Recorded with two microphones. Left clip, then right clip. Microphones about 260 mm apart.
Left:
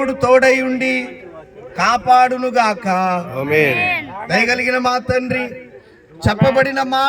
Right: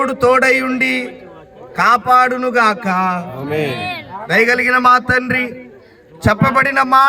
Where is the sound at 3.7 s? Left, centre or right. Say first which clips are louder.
Left 6 dB; right.